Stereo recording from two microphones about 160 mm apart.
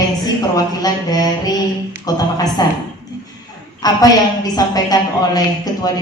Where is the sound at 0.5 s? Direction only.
25° left (ahead or behind).